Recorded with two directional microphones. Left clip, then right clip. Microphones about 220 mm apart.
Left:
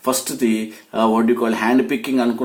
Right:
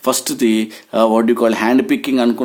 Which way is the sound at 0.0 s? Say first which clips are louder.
Right 4 dB; 45° right (ahead or behind).